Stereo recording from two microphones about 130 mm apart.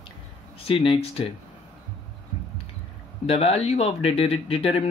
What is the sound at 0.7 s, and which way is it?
Speech, 45° left (ahead or behind).